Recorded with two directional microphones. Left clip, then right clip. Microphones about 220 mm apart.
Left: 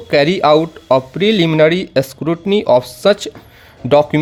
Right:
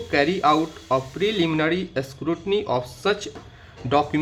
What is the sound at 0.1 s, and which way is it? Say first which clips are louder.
Speech: left 9 dB; 45° left (ahead or behind).